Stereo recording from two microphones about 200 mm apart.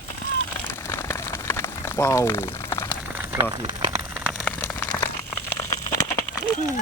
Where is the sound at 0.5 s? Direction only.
15° left (ahead or behind).